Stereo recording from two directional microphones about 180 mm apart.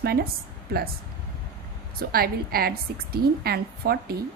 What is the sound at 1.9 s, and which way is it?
A woman's voice, 55° right (ahead or behind).